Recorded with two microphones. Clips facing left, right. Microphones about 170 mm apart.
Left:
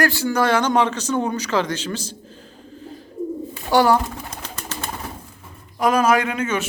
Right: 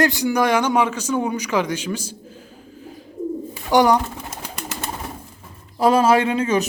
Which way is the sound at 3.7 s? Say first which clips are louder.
Right 1 dB; 15° right (ahead or behind).